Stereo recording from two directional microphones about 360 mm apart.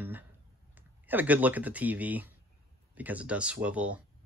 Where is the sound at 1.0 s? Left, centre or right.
Centre.